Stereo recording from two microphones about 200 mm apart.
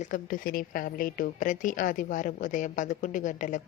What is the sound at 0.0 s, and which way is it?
A woman's voice, 40° left (ahead or behind).